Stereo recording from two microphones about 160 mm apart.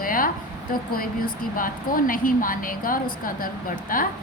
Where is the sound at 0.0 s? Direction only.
60° left (ahead or behind).